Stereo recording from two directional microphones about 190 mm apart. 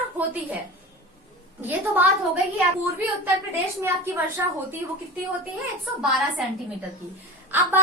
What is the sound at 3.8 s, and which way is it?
Speech, 10° right (ahead or behind).